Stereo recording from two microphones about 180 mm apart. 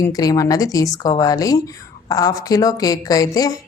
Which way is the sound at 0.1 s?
20° left (ahead or behind).